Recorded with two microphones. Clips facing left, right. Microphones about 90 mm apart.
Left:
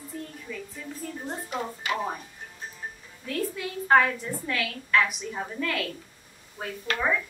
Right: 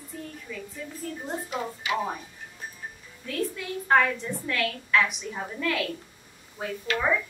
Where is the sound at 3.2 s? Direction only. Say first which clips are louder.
Even; centre (ahead or behind).